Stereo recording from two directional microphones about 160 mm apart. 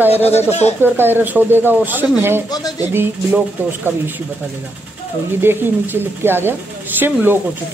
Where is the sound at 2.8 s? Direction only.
15° right (ahead or behind).